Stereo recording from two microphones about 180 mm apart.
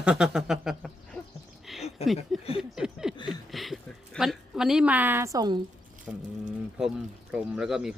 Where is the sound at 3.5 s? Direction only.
Centre (ahead or behind); by 5.6 s 20° right (ahead or behind).